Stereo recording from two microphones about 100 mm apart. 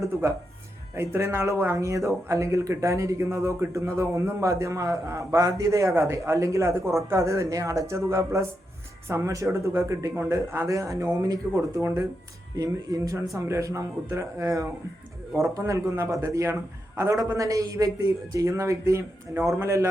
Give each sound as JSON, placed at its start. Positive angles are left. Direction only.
{"t": 0.9, "sound": "speech", "side_deg": -25}